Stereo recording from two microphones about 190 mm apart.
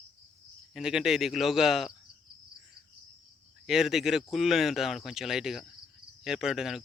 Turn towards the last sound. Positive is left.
turn(degrees=0)  # may be behind; listen again after turning